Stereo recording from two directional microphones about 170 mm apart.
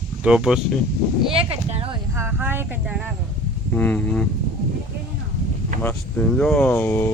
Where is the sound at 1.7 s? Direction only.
35° right (ahead or behind).